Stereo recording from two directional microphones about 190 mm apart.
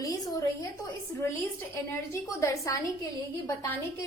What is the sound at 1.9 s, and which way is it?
Speech, 15° left (ahead or behind).